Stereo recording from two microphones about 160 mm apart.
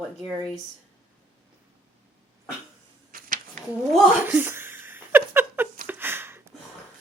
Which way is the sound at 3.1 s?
60° right (ahead or behind).